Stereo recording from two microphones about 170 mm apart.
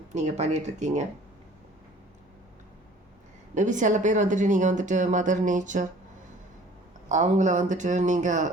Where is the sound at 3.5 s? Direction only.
45° right (ahead or behind).